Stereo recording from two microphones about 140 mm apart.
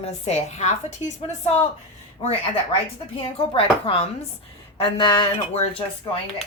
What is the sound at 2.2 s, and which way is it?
Speech, 45° left (ahead or behind).